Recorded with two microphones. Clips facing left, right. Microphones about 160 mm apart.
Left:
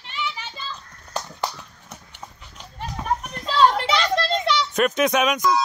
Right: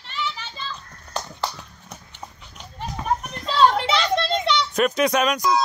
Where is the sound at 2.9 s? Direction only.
5° left (ahead or behind).